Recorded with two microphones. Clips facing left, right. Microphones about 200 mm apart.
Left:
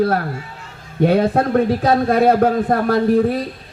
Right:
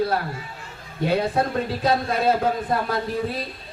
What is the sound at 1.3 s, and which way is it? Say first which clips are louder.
A man's voice: left 8 dB; 60° left (ahead or behind).